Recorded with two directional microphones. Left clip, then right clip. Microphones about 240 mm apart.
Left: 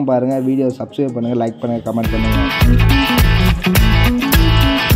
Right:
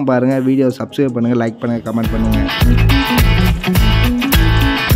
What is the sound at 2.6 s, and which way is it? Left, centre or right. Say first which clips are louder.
Music: even; centre.